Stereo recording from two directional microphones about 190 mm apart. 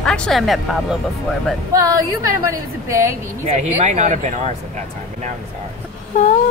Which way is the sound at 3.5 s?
35° right (ahead or behind).